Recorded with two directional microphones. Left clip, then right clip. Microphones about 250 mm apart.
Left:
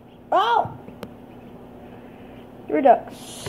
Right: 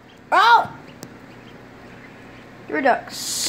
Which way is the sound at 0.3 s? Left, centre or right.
Right.